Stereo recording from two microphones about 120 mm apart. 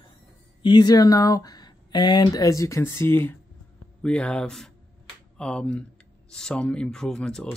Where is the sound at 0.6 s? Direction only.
35° left (ahead or behind); by 3.3 s 20° left (ahead or behind).